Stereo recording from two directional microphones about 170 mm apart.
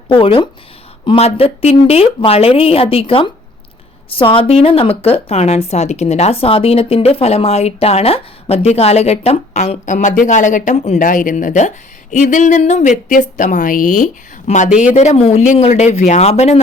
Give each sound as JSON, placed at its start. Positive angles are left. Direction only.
{"t": 0.1, "sound": "a woman's voice", "side_deg": 30}